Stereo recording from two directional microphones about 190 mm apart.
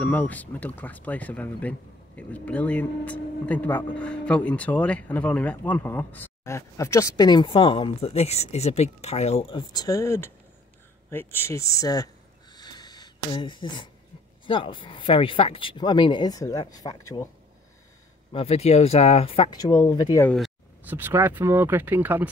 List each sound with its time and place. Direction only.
0.0 s speech: 5° left (ahead or behind)
12.5 s a sound: 20° left (ahead or behind)
14.4 s speech: 25° left (ahead or behind)
18.3 s speech: 30° left (ahead or behind)
20.2 s speech: centre (ahead or behind)